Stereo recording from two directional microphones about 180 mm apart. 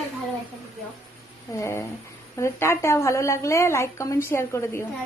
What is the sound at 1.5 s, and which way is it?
A woman's voice, 15° left (ahead or behind).